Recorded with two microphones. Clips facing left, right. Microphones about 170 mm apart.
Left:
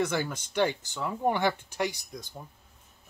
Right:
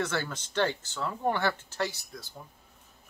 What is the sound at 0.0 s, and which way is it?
Speech, 10° left (ahead or behind).